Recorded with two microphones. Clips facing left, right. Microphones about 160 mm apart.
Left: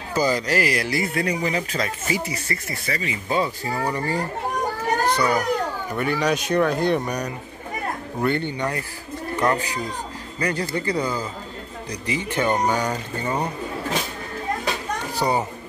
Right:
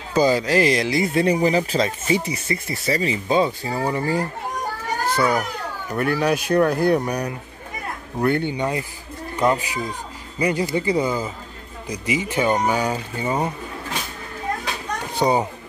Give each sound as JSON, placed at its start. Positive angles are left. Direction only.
{"t": 0.1, "sound": "speech", "side_deg": -10}
{"t": 2.9, "sound": "speech", "side_deg": -35}
{"t": 3.3, "sound": "speech", "side_deg": -20}
{"t": 3.8, "sound": "speech", "side_deg": -5}
{"t": 15.1, "sound": "a child's voice", "side_deg": -20}